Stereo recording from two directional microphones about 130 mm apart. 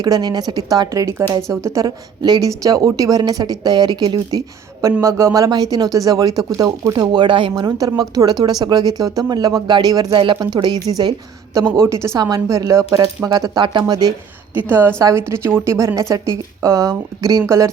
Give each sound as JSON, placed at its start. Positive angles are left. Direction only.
{"t": 0.0, "sound": "a woman's voice", "side_deg": -30}
{"t": 7.5, "sound": "a woman's voice", "side_deg": -25}
{"t": 14.7, "sound": "a woman's voice", "side_deg": -15}